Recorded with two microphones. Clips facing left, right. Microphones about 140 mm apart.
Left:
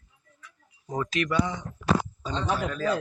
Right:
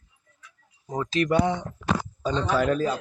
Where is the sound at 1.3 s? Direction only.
60° right (ahead or behind).